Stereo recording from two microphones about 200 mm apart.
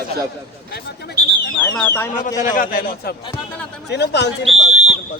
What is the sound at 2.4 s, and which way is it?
Speech, 40° left (ahead or behind).